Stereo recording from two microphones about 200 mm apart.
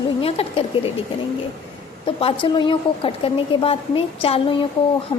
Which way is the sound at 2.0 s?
25° left (ahead or behind).